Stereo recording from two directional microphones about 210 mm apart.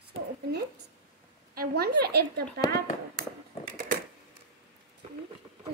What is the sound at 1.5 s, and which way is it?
A child's voice, 45° right (ahead or behind).